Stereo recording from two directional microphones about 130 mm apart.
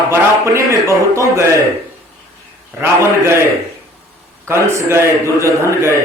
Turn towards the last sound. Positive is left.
turn(degrees=-20)  # may be behind; listen again after turning